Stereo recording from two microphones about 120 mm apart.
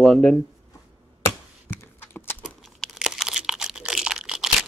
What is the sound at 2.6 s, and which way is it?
Crumpling, centre (ahead or behind).